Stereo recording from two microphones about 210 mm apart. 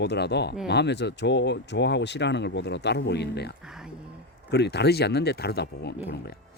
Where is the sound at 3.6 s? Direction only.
5° right (ahead or behind).